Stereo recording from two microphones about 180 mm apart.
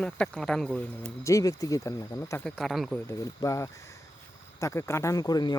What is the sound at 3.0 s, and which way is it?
Speech, 20° left (ahead or behind).